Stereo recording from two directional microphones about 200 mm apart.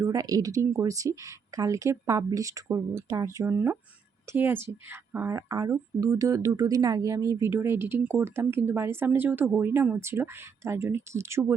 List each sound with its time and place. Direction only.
0.0 s a woman's voice: 15° right (ahead or behind)